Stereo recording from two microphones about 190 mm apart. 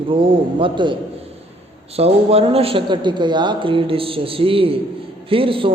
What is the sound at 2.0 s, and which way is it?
A man's voice, 30° right (ahead or behind).